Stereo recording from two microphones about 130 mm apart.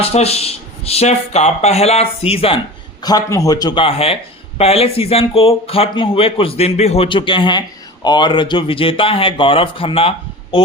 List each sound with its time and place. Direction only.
0.0 s speech: 50° left (ahead or behind)
3.0 s speech: 30° left (ahead or behind); by 10.6 s 45° left (ahead or behind)